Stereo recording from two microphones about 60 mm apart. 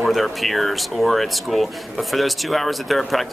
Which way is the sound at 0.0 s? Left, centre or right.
Centre.